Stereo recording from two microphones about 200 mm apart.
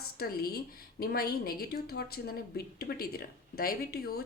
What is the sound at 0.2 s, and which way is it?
Speech, 50° left (ahead or behind).